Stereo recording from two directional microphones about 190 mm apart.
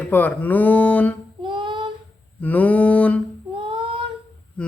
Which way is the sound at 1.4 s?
25° right (ahead or behind).